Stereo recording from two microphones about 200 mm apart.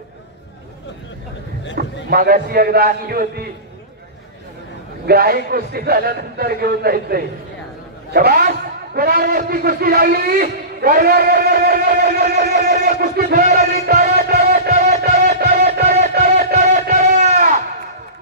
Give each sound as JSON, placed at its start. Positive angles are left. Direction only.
{"t": 1.8, "sound": "a man's voice", "side_deg": -50}
{"t": 5.0, "sound": "a man's voice", "side_deg": -50}
{"t": 13.8, "sound": "music", "side_deg": -50}
{"t": 14.7, "sound": "music", "side_deg": -35}
{"t": 15.3, "sound": "music", "side_deg": -50}